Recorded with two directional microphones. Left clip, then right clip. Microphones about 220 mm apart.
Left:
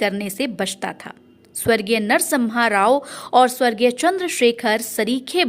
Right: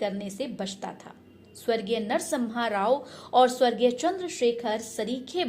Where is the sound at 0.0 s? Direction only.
30° left (ahead or behind).